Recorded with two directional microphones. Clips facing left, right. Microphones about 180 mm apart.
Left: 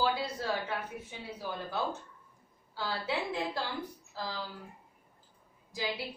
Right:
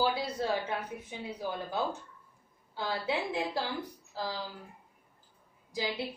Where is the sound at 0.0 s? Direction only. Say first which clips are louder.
Right 1 dB; 20° right (ahead or behind).